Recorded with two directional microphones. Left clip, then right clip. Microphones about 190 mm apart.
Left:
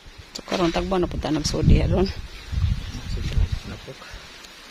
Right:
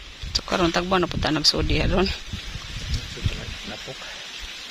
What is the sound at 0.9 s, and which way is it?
Speech, 15° left (ahead or behind).